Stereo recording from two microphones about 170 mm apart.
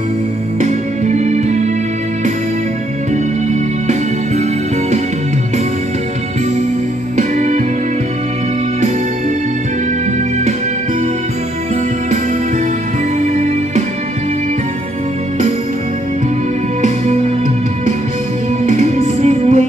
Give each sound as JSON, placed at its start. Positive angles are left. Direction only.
{"t": 0.6, "sound": "music", "side_deg": -45}
{"t": 7.2, "sound": "music", "side_deg": -45}
{"t": 13.2, "sound": "music", "side_deg": -45}
{"t": 18.7, "sound": "music", "side_deg": -45}